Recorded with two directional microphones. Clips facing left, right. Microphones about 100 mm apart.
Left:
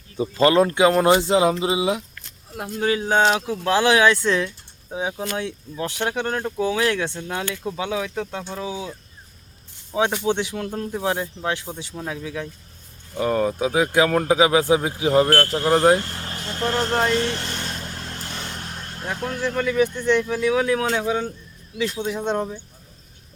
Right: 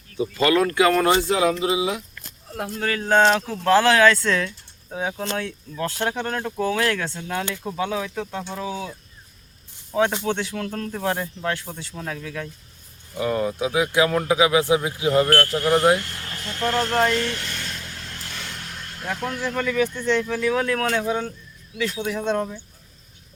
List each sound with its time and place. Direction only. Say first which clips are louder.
0.2 s speech: left 3 dB; 30° left (ahead or behind)
13.1 s speech: left 2 dB; 40° left (ahead or behind); by 21.3 s 20° left (ahead or behind)
21.8 s speech: left 1 dB; 30° left (ahead or behind)